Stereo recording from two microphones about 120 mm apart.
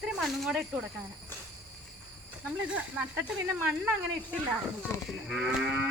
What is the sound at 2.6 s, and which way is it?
Speech, 10° right (ahead or behind).